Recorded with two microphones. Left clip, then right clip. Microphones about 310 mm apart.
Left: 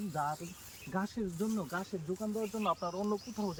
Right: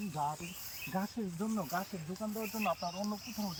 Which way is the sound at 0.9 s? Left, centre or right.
Centre.